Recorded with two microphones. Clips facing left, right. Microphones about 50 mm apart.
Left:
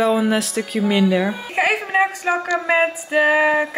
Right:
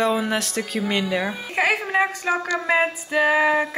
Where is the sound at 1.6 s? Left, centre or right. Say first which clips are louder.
Left 2 dB; centre.